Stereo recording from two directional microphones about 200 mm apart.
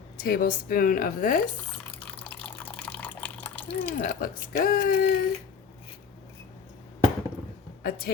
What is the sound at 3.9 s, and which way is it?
A woman's voice, 45° left (ahead or behind).